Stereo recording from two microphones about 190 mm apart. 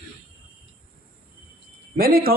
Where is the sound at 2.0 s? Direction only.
50° right (ahead or behind).